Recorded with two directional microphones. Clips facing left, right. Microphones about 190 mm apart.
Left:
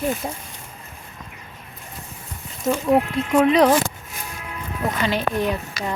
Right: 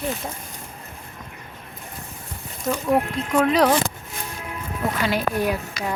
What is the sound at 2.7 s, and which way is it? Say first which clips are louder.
Speech: left 3 dB; 20° left (ahead or behind).